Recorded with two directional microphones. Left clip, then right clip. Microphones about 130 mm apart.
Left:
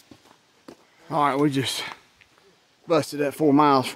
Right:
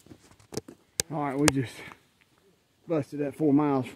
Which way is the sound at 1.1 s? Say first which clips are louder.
Left 6 dB; 50° left (ahead or behind).